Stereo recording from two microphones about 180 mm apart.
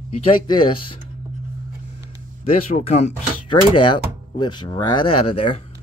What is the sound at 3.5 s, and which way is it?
Speech, 25° left (ahead or behind).